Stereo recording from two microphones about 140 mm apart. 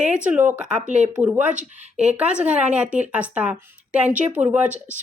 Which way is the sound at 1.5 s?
60° right (ahead or behind).